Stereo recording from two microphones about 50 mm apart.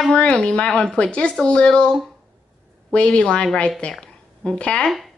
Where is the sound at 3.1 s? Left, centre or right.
Centre.